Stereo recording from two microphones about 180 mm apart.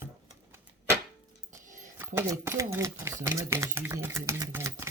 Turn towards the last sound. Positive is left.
turn(degrees=-15)  # may be behind; listen again after turning